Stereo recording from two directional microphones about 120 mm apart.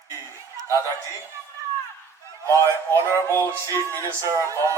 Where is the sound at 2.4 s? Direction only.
25° right (ahead or behind).